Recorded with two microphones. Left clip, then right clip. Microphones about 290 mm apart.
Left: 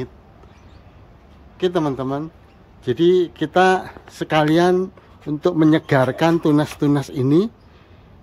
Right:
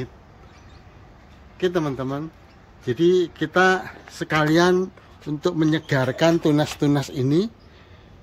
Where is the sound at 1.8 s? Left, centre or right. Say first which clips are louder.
Left 4 dB; centre.